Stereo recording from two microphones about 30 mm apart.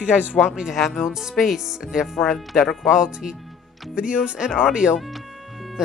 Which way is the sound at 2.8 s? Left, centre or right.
Right.